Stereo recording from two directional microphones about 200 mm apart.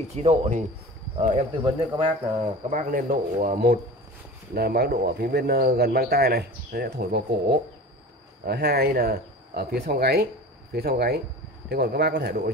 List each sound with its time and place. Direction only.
0.1 s speech: 30° right (ahead or behind)
2.7 s speech: 45° right (ahead or behind)